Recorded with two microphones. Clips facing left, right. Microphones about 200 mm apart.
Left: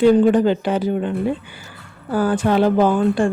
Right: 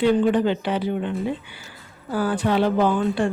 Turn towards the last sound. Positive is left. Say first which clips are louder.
# left 4 dB
turn(degrees=45)  # may be behind; listen again after turning